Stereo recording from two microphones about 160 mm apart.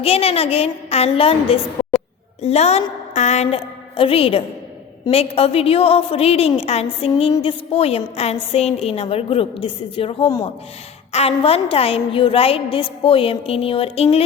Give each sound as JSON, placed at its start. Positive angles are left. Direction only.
{"t": 0.0, "sound": "a woman's voice", "side_deg": 35}